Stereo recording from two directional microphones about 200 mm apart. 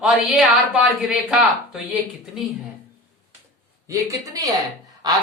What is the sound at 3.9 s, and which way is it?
Speech, 15° right (ahead or behind).